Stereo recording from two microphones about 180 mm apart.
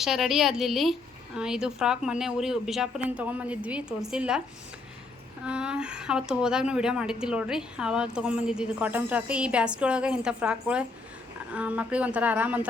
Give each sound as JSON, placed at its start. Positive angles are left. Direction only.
{"t": 0.0, "sound": "speech", "side_deg": 0}
{"t": 5.5, "sound": "speech", "side_deg": -5}